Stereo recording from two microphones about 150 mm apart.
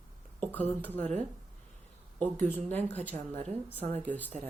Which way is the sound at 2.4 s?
10° left (ahead or behind).